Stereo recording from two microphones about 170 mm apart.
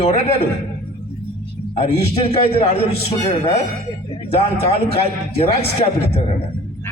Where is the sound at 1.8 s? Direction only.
35° left (ahead or behind).